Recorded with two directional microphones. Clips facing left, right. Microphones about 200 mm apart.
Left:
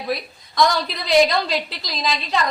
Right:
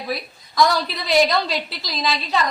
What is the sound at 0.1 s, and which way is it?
A woman's voice, centre (ahead or behind).